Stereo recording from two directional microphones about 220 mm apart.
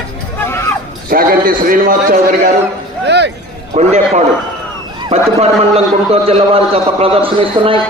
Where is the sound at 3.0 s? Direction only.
50° right (ahead or behind).